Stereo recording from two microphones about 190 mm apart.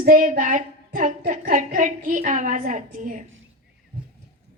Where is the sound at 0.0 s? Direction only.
45° right (ahead or behind).